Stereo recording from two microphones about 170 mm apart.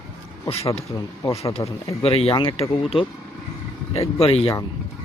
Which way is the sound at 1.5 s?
35° left (ahead or behind).